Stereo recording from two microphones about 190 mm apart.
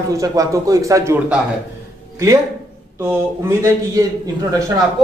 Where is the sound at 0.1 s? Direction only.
20° right (ahead or behind).